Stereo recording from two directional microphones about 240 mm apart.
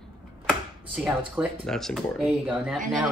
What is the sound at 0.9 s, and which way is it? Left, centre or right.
Speech, centre.